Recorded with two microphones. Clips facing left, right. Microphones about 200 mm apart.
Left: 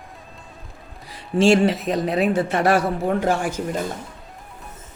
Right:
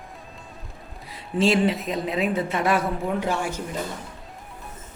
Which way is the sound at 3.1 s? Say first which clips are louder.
Left 6 dB; 50° left (ahead or behind).